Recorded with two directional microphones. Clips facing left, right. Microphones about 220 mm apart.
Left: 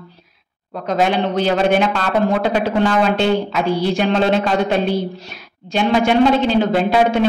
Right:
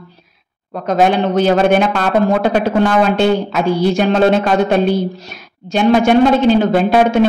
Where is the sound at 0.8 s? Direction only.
45° right (ahead or behind).